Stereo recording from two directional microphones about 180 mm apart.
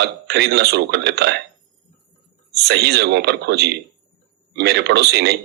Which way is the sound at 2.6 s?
65° right (ahead or behind).